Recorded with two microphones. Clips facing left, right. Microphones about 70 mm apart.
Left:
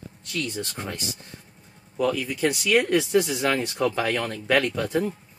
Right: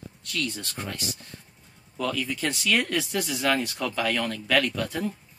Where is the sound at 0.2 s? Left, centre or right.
Left.